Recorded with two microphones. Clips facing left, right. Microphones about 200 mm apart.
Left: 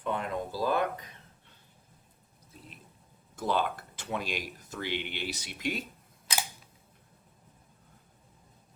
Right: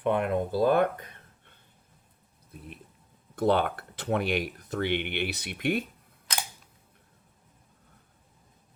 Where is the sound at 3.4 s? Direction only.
60° right (ahead or behind).